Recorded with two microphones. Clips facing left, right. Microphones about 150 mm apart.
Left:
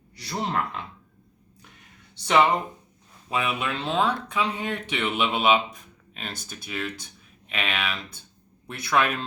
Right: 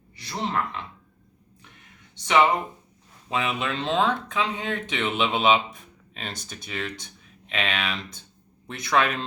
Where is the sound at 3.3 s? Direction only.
10° left (ahead or behind).